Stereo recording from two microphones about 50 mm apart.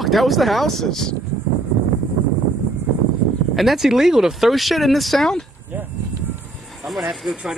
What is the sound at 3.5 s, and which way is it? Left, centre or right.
Speech, centre.